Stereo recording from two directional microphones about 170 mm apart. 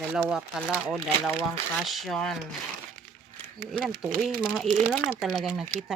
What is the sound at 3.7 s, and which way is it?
Speech, centre (ahead or behind).